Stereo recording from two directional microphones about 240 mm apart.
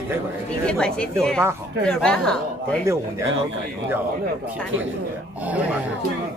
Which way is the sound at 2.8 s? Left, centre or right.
Centre.